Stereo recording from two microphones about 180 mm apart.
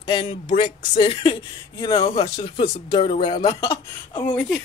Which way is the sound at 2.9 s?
40° left (ahead or behind).